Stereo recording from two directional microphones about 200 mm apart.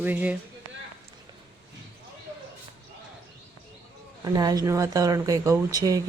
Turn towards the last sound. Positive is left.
turn(degrees=-20)  # may be behind; listen again after turning